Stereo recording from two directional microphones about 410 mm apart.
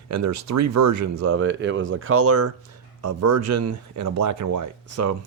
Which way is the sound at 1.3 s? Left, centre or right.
Right.